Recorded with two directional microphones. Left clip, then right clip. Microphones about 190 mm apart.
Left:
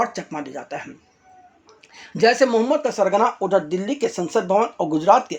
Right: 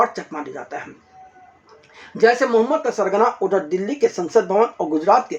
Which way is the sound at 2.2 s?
40° left (ahead or behind).